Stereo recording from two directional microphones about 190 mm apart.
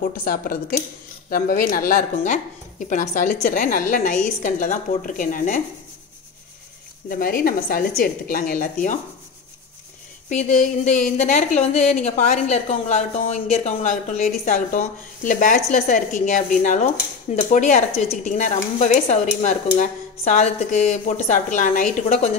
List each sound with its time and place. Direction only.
0.2 s a woman's voice: 50° left (ahead or behind)
7.1 s a woman's voice: 50° left (ahead or behind)
10.3 s a woman's voice: 40° left (ahead or behind)